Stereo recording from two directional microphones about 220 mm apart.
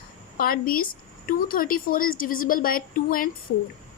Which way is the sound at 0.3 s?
40° left (ahead or behind).